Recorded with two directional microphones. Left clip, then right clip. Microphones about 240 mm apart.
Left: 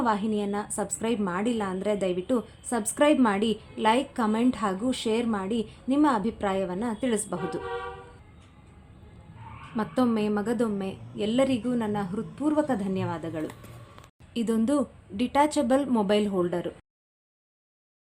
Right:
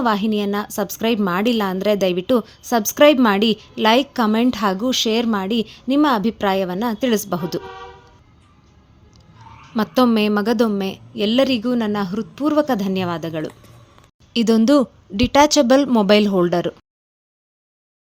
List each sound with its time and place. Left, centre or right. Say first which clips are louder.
0.0 s a woman's voice: right 7 dB; right
9.7 s a woman's voice: right 10 dB; right
13.5 s a sound: right 1 dB; centre
14.3 s a woman's voice: right 11 dB; right